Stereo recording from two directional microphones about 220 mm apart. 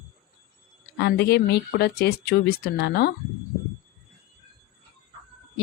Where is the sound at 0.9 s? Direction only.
50° left (ahead or behind).